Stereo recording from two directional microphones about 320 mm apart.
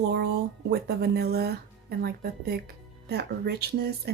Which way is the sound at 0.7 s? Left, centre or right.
Right.